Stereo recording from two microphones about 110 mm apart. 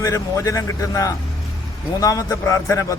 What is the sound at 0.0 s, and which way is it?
A man's voice, 30° left (ahead or behind).